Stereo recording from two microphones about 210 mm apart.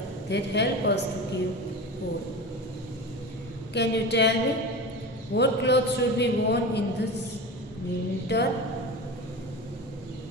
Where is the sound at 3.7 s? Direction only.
55° left (ahead or behind).